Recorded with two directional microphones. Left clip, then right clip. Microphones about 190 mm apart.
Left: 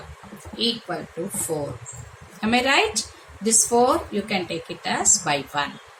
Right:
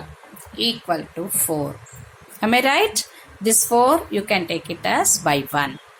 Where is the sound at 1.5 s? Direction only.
65° right (ahead or behind).